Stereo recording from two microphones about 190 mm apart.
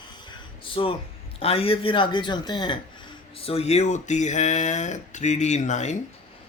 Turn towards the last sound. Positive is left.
turn(degrees=35)  # may be behind; listen again after turning